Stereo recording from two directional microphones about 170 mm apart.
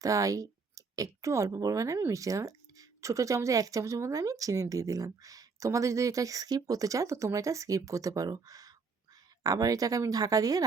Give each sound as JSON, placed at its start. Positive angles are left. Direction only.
{"t": 0.0, "sound": "speech", "side_deg": -20}